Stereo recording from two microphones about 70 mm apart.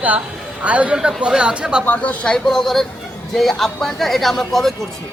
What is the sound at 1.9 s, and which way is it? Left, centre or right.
A woman's voice, centre.